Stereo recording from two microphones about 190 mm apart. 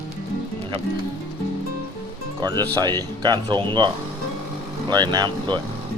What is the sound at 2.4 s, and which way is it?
Speech, 20° right (ahead or behind).